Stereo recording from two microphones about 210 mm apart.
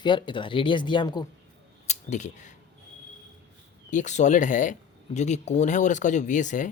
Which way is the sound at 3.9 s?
35° left (ahead or behind).